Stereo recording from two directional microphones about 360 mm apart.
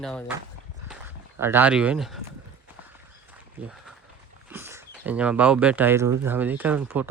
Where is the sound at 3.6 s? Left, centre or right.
Centre.